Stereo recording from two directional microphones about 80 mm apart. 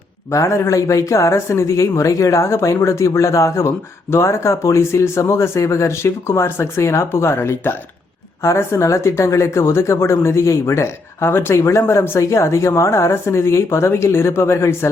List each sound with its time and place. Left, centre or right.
0.3 s speech: left